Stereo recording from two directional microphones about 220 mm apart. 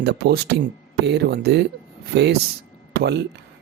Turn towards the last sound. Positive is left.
turn(degrees=-50)  # may be behind; listen again after turning